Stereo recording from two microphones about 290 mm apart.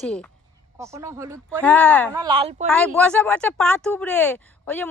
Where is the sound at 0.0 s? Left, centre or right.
Centre.